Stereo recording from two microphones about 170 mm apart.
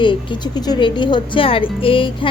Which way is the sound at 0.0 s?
30° left (ahead or behind).